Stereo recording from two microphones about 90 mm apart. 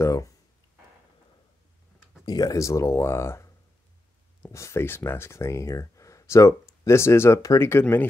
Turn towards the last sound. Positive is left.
turn(degrees=30)  # may be behind; listen again after turning